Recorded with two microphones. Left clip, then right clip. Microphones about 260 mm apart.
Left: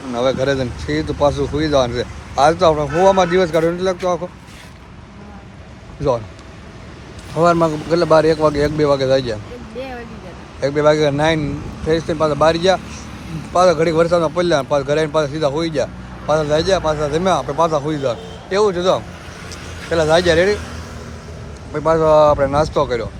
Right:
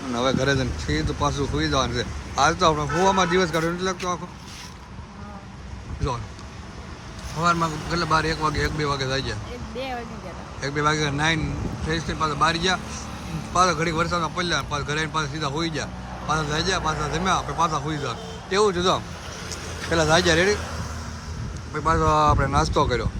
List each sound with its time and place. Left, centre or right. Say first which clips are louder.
0.1 s a man's voice: left 6 dB; centre
6.0 s a man's voice: left 12 dB; centre
7.4 s a man's voice: left 8 dB; centre
10.6 s a man's voice: left 9 dB; centre
21.7 s a man's voice: left 8 dB; centre